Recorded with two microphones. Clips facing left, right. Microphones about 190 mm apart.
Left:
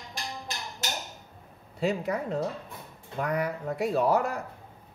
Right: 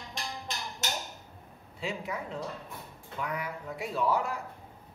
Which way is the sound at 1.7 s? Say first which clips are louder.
Left 8 dB; 40° left (ahead or behind).